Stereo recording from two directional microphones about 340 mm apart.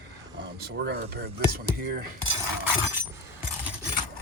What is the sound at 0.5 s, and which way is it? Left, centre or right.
Speech, right.